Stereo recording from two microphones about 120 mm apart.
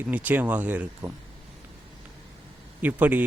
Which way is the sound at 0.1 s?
15° right (ahead or behind).